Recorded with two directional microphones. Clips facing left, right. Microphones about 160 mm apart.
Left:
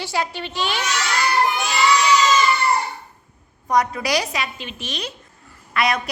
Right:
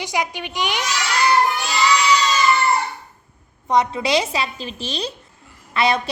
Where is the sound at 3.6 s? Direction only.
25° right (ahead or behind).